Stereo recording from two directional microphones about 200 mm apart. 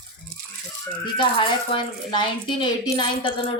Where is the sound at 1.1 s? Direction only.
25° left (ahead or behind).